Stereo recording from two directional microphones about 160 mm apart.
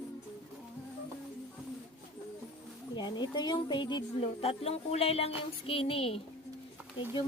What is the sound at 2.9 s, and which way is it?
A woman's voice, 25° left (ahead or behind).